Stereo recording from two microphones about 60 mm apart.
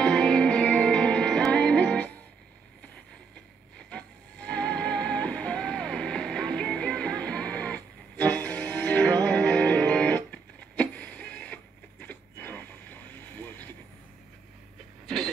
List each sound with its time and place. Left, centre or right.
0.0 s music: centre
3.9 s music: centre